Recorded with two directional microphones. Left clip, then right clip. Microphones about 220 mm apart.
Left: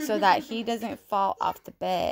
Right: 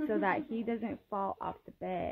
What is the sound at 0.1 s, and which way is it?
A woman's voice, 10° left (ahead or behind).